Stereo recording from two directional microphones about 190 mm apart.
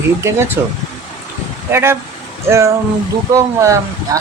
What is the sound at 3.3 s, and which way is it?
Speech, 15° right (ahead or behind).